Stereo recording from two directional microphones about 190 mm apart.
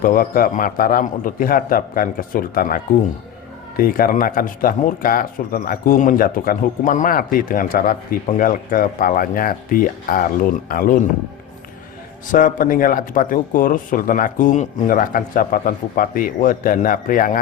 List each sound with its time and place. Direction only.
0.0 s speech: 50° left (ahead or behind)
12.3 s speech: 45° left (ahead or behind)